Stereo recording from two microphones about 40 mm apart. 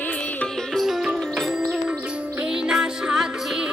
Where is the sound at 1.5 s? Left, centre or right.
Centre.